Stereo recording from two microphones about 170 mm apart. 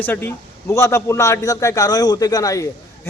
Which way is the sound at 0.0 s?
10° left (ahead or behind).